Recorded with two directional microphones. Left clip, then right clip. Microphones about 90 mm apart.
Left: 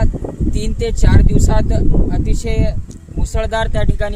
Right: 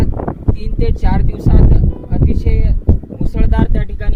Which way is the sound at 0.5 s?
35° left (ahead or behind).